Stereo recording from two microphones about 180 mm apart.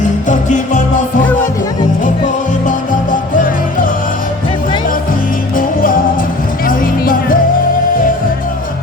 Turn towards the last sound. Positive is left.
turn(degrees=55)  # may be behind; listen again after turning